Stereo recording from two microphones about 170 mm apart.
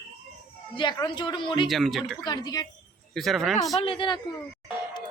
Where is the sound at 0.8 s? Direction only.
25° left (ahead or behind).